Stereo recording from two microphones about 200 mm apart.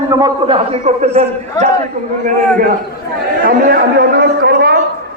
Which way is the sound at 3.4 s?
50° right (ahead or behind).